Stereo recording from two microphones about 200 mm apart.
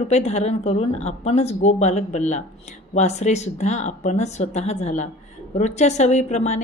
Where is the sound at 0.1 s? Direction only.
35° left (ahead or behind).